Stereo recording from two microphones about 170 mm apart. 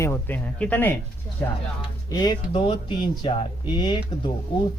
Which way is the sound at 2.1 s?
25° left (ahead or behind).